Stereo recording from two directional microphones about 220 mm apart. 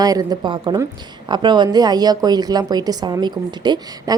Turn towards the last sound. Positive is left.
turn(degrees=-20)  # may be behind; listen again after turning